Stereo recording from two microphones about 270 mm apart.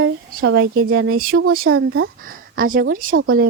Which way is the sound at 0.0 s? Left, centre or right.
Right.